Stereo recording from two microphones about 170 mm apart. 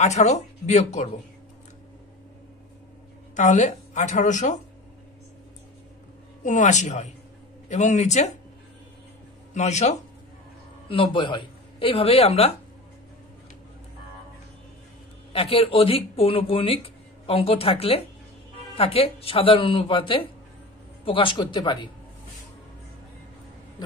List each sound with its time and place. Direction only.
0.0 s a woman's voice: 40° left (ahead or behind)
3.3 s a woman's voice: 45° left (ahead or behind)
6.4 s a woman's voice: 45° left (ahead or behind)
9.5 s speech: 45° left (ahead or behind)
10.9 s speech: 30° left (ahead or behind)
15.3 s speech: 35° left (ahead or behind)